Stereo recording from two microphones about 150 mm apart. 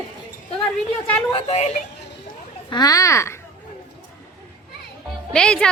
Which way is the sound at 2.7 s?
25° left (ahead or behind).